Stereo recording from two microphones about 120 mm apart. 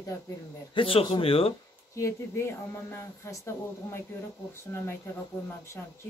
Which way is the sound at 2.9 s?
25° left (ahead or behind).